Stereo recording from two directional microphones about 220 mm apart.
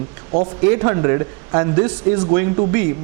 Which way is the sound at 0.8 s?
20° right (ahead or behind).